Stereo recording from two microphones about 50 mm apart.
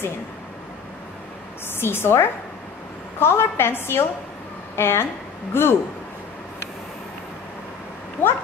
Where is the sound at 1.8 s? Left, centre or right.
Left.